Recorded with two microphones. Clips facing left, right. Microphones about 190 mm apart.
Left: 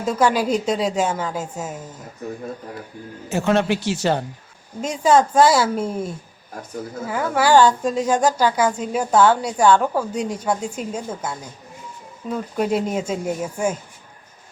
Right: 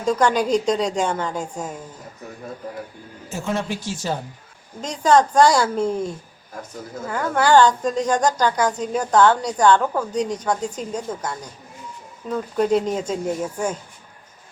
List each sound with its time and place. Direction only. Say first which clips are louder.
0.0 s a woman's voice: even; 5° left (ahead or behind)
3.2 s speech: left 7 dB; 70° left (ahead or behind)
4.8 s speech: even; 10° left (ahead or behind)